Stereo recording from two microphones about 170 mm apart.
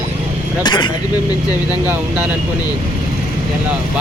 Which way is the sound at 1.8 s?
10° right (ahead or behind).